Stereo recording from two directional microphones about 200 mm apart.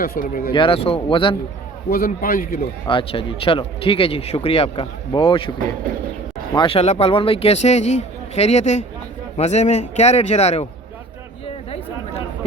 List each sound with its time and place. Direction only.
0.0 s a man's voice: 45° left (ahead or behind)
0.5 s speech: 25° left (ahead or behind)
1.9 s a man's voice: 45° left (ahead or behind)
2.8 s speech: 25° left (ahead or behind)
6.5 s speech: 25° left (ahead or behind)